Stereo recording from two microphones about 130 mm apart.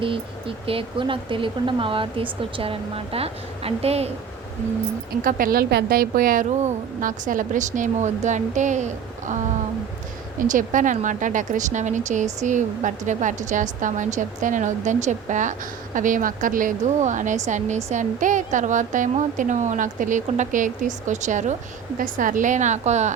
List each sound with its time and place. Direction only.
0.0 s speech: 45° right (ahead or behind)
5.2 s speech: 90° right; by 9.4 s 70° right (ahead or behind)
10.3 s speech: 85° right
16.0 s speech: 90° right; by 17.8 s 65° right (ahead or behind)
17.9 s speech: 75° right (ahead or behind)
21.9 s speech: 90° right; by 23.1 s 60° right (ahead or behind)